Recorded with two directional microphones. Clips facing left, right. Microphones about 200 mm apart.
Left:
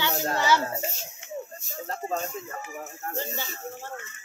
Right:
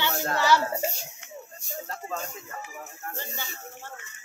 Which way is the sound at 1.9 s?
40° left (ahead or behind).